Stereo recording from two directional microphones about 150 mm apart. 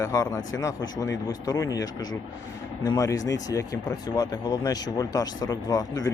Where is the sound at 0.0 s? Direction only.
20° left (ahead or behind).